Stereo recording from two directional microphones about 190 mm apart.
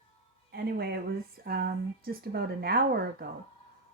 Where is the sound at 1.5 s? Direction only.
55° right (ahead or behind).